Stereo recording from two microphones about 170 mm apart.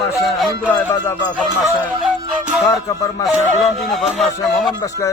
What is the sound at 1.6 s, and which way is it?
Music, centre (ahead or behind).